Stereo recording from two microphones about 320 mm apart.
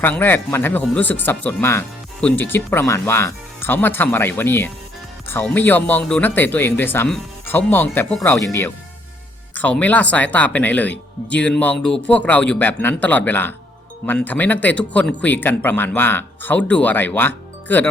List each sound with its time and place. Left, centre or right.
0.0 s speech: centre